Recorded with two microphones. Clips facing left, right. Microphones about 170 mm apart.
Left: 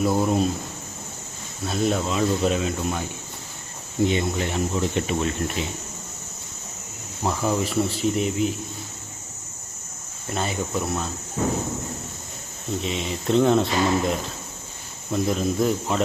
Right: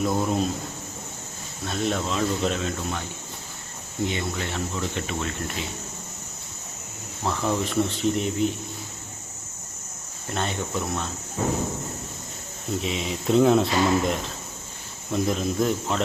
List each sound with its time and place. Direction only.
0.0 s speech: 5° left (ahead or behind)
1.6 s speech: 5° left (ahead or behind)
4.1 s speech: 15° left (ahead or behind)
7.3 s speech: 5° left (ahead or behind)
10.3 s speech: 5° left (ahead or behind)
12.8 s speech: centre (ahead or behind)